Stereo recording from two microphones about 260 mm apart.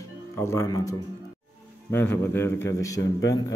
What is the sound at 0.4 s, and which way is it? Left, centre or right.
A man's voice, centre.